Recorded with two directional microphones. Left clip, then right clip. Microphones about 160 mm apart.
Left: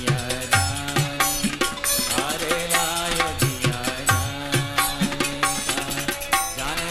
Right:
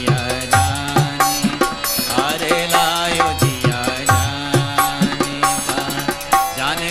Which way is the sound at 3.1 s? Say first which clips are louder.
Right 7 dB; 30° left (ahead or behind).